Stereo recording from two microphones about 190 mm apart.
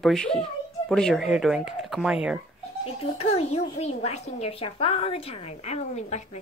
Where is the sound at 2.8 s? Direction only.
30° left (ahead or behind).